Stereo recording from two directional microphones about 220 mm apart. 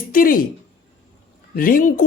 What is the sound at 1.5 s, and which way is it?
Speech, 40° left (ahead or behind).